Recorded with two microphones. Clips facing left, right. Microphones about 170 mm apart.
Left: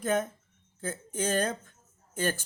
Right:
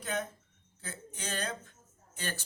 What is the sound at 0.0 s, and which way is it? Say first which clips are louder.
Speech: left 8 dB; 50° left (ahead or behind).